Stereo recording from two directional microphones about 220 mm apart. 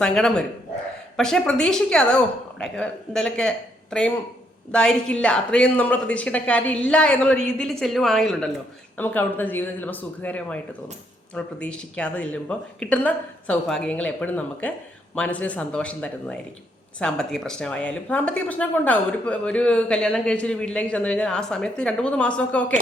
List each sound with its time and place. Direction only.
0.0 s speech: 5° left (ahead or behind)